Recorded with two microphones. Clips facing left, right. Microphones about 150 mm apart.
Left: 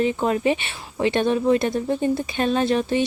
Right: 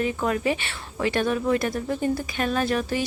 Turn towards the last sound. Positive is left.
turn(degrees=25)  # may be behind; listen again after turning